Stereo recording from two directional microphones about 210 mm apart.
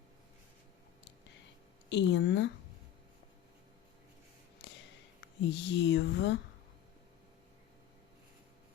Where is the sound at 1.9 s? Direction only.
55° left (ahead or behind).